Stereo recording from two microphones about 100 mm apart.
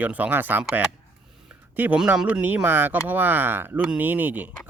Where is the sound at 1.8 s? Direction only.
15° right (ahead or behind).